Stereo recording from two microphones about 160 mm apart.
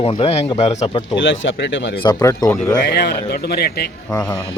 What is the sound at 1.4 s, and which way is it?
Speech, 90° left.